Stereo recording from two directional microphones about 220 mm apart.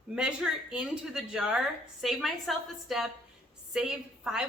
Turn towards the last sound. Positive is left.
turn(degrees=-5)  # may be behind; listen again after turning